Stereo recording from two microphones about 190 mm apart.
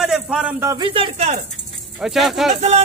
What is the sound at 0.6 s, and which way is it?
Speech, 20° right (ahead or behind).